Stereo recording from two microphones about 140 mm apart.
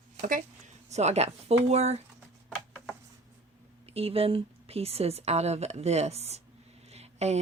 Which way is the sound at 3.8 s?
45° right (ahead or behind).